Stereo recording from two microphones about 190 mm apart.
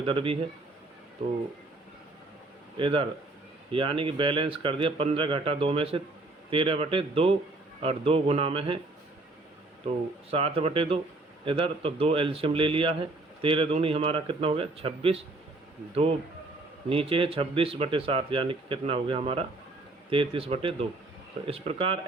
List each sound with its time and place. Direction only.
0.0 s speech: 30° right (ahead or behind)
2.7 s speech: 25° right (ahead or behind)
10.3 s speech: 30° right (ahead or behind)
16.9 s speech: 30° right (ahead or behind)